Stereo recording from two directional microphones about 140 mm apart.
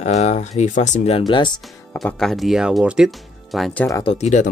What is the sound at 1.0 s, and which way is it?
Speech, 40° left (ahead or behind).